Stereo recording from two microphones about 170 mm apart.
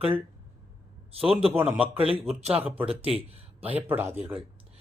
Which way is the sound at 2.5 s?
10° right (ahead or behind).